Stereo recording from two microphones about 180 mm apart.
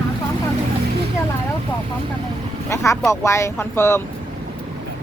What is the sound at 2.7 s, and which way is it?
Speech, 15° left (ahead or behind).